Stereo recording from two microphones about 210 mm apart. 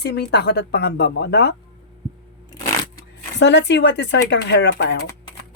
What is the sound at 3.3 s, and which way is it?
Speech, 55° left (ahead or behind).